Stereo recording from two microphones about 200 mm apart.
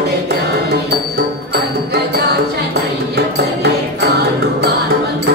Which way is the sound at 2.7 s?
55° right (ahead or behind).